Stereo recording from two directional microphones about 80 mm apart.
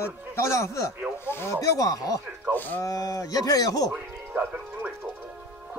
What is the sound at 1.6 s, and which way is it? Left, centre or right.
Speech, left.